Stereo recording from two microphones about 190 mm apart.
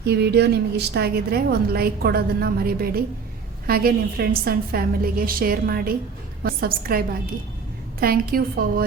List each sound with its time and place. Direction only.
0.0 s a woman's voice: 60° right (ahead or behind)